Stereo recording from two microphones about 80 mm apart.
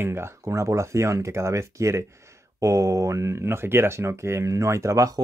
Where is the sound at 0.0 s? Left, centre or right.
Right.